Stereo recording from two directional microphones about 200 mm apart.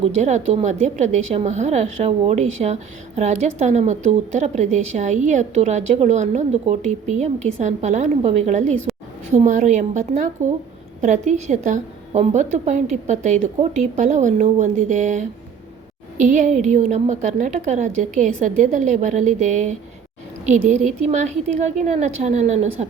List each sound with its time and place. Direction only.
0.0 s a woman's voice: 35° right (ahead or behind)
8.9 s a sound: centre (ahead or behind)
9.3 s a woman's voice: 35° right (ahead or behind)
16.3 s a woman's voice: 40° right (ahead or behind)
20.7 s a woman's voice: 35° right (ahead or behind)